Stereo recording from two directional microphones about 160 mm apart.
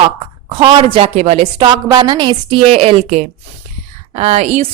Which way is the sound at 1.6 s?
25° right (ahead or behind).